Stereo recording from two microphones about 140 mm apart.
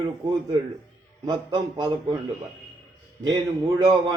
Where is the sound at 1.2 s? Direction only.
30° right (ahead or behind).